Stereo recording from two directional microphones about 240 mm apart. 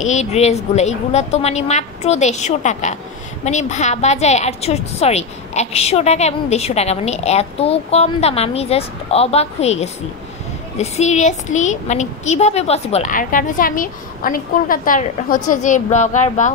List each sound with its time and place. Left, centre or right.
0.0 s a woman's voice: left